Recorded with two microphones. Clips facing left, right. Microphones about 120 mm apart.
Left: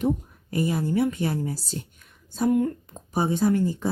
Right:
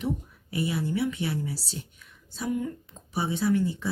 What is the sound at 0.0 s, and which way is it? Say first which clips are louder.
Speech: left 6 dB; 45° left (ahead or behind).